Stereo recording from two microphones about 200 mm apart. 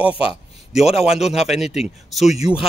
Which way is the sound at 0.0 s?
25° left (ahead or behind).